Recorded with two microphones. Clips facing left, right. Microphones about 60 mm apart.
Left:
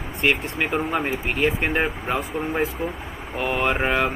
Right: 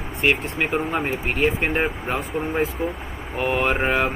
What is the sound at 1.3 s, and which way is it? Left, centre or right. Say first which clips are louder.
Speech: right 1 dB; centre.